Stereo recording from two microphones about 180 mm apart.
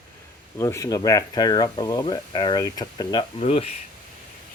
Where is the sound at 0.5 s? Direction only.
15° left (ahead or behind).